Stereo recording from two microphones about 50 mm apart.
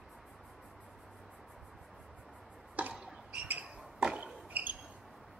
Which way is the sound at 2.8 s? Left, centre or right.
Right.